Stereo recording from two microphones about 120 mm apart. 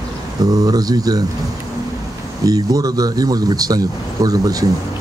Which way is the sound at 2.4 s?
30° right (ahead or behind).